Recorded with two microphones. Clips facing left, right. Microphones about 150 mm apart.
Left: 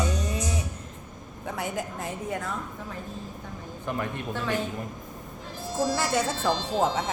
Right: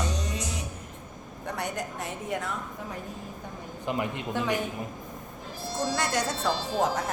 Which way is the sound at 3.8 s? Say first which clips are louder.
Right 1 dB; 15° right (ahead or behind).